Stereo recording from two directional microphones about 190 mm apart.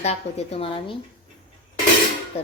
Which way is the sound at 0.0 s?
35° left (ahead or behind).